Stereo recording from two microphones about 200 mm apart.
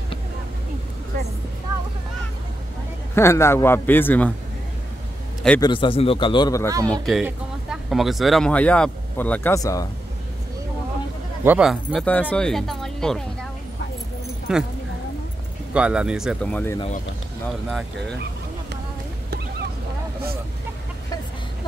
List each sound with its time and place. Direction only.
3.2 s a man's voice: 15° left (ahead or behind)
5.6 s a man's voice: 25° left (ahead or behind)
6.9 s speech: centre (ahead or behind); by 9.8 s 15° left (ahead or behind)
11.4 s speech: 5° right (ahead or behind)
14.5 s speech: 5° right (ahead or behind)
15.7 s speech: 5° right (ahead or behind); by 16.8 s 10° left (ahead or behind)
17.6 s speech: centre (ahead or behind)